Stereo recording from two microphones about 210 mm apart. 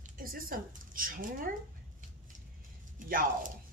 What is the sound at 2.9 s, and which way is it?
Speech, 40° right (ahead or behind).